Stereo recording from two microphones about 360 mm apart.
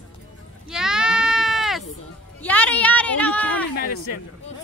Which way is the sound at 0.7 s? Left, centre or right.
Centre.